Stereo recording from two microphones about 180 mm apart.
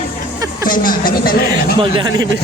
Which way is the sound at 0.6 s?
50° left (ahead or behind).